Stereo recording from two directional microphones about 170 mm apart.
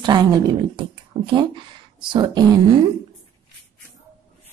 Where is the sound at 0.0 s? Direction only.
25° right (ahead or behind).